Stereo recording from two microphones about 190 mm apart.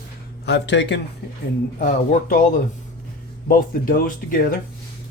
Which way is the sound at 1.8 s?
45° left (ahead or behind).